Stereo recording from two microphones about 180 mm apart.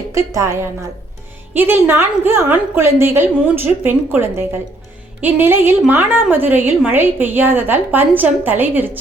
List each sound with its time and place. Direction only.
0.1 s a woman's voice: 15° right (ahead or behind)